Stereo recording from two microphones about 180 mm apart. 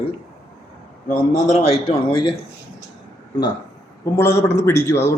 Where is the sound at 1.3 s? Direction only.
40° left (ahead or behind).